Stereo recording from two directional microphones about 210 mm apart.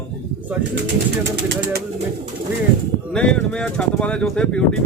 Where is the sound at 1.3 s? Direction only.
55° right (ahead or behind).